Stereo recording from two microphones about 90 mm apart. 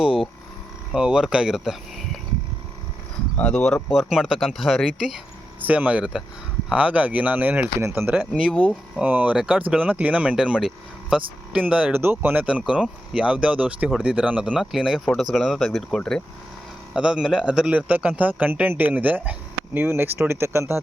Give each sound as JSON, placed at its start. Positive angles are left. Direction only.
{"t": 0.9, "sound": "speech", "side_deg": -10}
{"t": 3.3, "sound": "speech", "side_deg": 10}
{"t": 3.9, "sound": "speech", "side_deg": 0}
{"t": 5.6, "sound": "speech", "side_deg": -15}
{"t": 7.8, "sound": "speech", "side_deg": -25}
{"t": 8.3, "sound": "speech", "side_deg": -10}
{"t": 16.9, "sound": "speech", "side_deg": -10}